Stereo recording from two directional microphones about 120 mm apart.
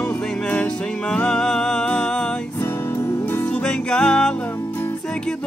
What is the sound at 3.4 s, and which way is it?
Music, 10° left (ahead or behind).